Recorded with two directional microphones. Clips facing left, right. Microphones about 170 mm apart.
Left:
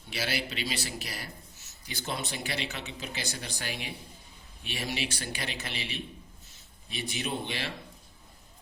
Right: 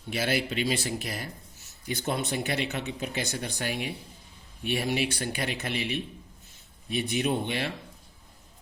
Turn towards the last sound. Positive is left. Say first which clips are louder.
# right 6 dB
turn(degrees=-50)  # may be behind; listen again after turning